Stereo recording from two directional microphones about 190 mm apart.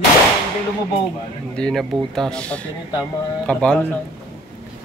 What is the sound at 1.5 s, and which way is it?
A man's voice, 5° left (ahead or behind).